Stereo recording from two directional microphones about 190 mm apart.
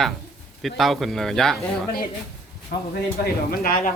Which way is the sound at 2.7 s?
55° left (ahead or behind).